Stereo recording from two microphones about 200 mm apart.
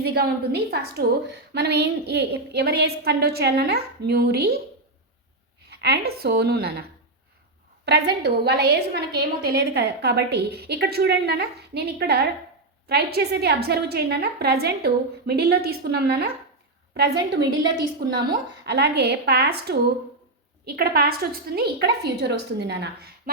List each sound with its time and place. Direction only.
0.0 s a woman's voice: 55° right (ahead or behind)
5.7 s a woman's voice: 55° right (ahead or behind)
7.9 s a woman's voice: 55° right (ahead or behind)